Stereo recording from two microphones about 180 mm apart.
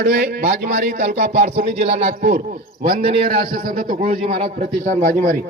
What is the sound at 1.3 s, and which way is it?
A man's voice, 35° right (ahead or behind).